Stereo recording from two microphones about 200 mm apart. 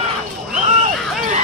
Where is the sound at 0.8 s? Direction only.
35° right (ahead or behind).